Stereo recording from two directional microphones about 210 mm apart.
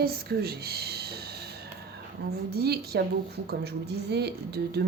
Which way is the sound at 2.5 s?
50° right (ahead or behind).